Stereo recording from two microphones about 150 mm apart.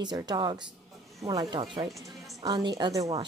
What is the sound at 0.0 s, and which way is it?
Speech, 30° right (ahead or behind).